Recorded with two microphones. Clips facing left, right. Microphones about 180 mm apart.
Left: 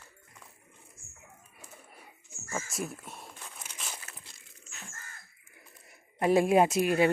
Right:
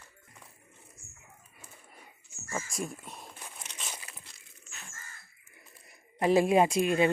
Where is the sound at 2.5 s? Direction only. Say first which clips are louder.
Even; 5° left (ahead or behind).